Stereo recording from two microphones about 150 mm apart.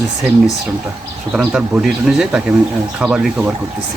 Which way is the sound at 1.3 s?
5° right (ahead or behind).